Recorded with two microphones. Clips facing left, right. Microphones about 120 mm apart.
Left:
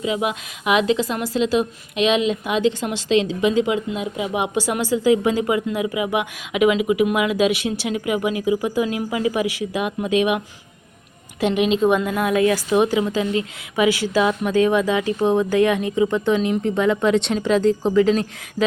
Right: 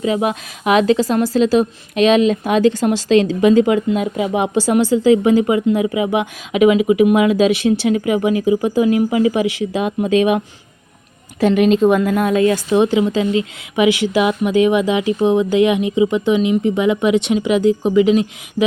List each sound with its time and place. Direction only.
0.0 s a woman's voice: 40° right (ahead or behind)
4.3 s a woman's voice: 30° right (ahead or behind)
12.3 s a woman's voice: 25° right (ahead or behind)